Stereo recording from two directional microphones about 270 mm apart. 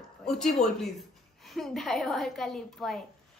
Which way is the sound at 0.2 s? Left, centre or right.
Centre.